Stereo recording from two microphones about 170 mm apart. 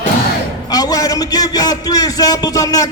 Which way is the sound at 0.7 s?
20° left (ahead or behind).